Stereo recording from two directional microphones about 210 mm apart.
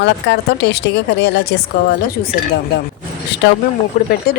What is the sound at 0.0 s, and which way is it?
A woman's voice, 55° left (ahead or behind).